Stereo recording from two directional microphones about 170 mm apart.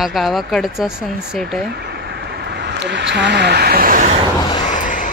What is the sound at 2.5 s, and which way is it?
Speech, 85° right.